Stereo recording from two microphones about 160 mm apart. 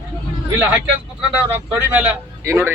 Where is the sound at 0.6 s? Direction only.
10° right (ahead or behind).